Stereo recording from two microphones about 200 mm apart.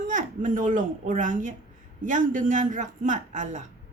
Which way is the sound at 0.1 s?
40° right (ahead or behind).